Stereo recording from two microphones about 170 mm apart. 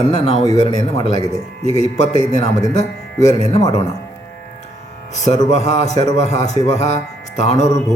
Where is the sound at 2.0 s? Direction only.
40° left (ahead or behind).